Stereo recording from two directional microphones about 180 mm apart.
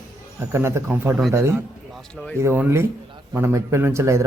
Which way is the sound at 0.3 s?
15° right (ahead or behind).